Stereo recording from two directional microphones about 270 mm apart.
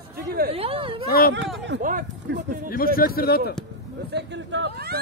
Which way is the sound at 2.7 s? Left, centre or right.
Left.